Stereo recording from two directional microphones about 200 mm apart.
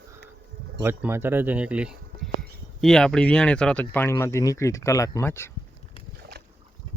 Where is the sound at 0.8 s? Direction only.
10° right (ahead or behind); by 5.5 s 10° left (ahead or behind).